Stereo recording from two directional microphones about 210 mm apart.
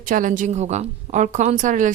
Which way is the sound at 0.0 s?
40° right (ahead or behind).